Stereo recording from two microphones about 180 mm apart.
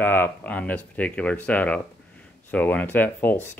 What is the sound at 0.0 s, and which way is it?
Speech, 10° left (ahead or behind).